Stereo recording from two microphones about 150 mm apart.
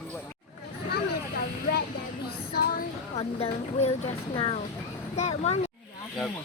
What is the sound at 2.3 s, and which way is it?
Child singing, 90° left.